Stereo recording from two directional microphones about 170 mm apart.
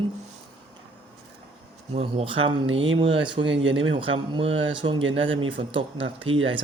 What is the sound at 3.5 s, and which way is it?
Speech, 90° right.